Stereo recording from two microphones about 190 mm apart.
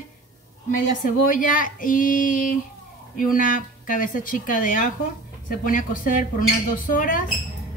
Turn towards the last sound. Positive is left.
turn(degrees=45)  # may be behind; listen again after turning